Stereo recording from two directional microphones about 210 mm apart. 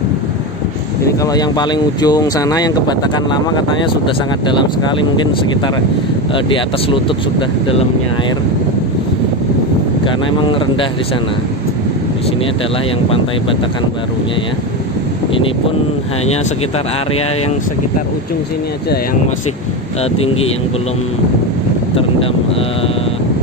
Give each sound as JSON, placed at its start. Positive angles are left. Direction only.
{"t": 1.0, "sound": "speech", "side_deg": 15}
{"t": 6.3, "sound": "speech", "side_deg": 25}